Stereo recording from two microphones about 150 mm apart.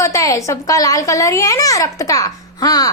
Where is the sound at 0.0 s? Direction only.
20° left (ahead or behind).